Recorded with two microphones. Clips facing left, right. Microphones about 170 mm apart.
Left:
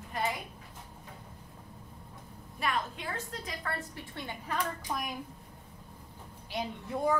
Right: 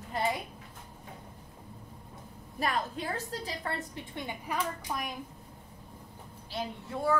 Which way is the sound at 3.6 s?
20° right (ahead or behind).